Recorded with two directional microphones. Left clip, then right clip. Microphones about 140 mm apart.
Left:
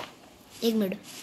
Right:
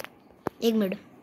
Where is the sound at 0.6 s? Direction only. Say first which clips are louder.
Right 1 dB; 10° right (ahead or behind).